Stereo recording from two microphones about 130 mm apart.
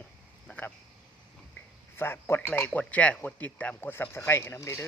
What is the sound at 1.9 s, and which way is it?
Speech, 15° left (ahead or behind).